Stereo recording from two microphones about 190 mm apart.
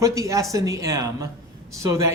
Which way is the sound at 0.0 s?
15° right (ahead or behind).